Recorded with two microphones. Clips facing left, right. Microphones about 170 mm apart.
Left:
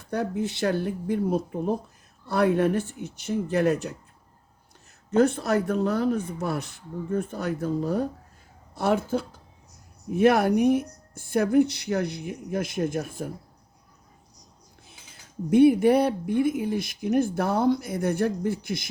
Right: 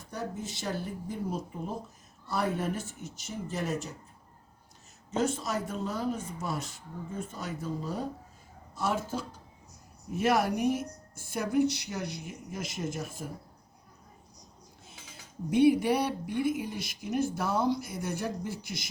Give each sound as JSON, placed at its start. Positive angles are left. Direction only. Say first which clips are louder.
{"t": 0.0, "sound": "speech", "louder": "left 9 dB", "side_deg": 65}
{"t": 5.1, "sound": "speech", "louder": "left 9 dB", "side_deg": 60}
{"t": 15.4, "sound": "speech", "louder": "left 6 dB", "side_deg": 55}